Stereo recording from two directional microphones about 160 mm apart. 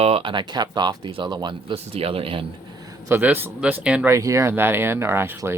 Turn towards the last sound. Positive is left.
turn(degrees=-15)  # may be behind; listen again after turning